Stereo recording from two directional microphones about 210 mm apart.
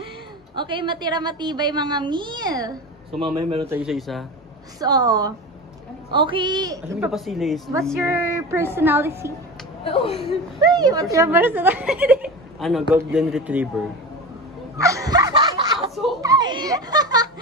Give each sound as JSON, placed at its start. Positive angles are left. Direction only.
{"t": 0.6, "sound": "a woman's voice", "side_deg": -25}
{"t": 3.6, "sound": "speech", "side_deg": -5}
{"t": 4.7, "sound": "a woman's voice", "side_deg": -20}
{"t": 7.0, "sound": "speech", "side_deg": 0}
{"t": 8.0, "sound": "speech", "side_deg": -10}
{"t": 10.6, "sound": "speech", "side_deg": -20}
{"t": 14.8, "sound": "a sound", "side_deg": -15}
{"t": 15.9, "sound": "a sound", "side_deg": 0}
{"t": 16.2, "sound": "music", "side_deg": -15}